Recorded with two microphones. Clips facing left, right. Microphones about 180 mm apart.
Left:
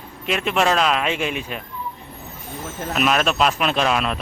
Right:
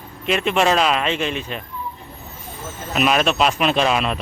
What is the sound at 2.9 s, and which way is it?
Speech, centre (ahead or behind).